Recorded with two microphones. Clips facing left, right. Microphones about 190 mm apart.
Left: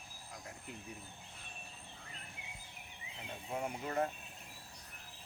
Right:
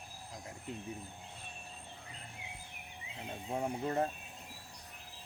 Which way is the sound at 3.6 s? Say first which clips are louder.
Right 3 dB; 30° right (ahead or behind).